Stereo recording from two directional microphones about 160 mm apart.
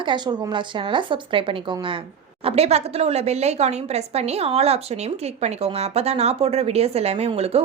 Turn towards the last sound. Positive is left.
turn(degrees=-40)  # may be behind; listen again after turning